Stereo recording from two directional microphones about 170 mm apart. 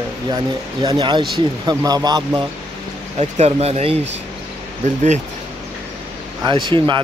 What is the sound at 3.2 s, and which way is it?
Speech, 40° right (ahead or behind).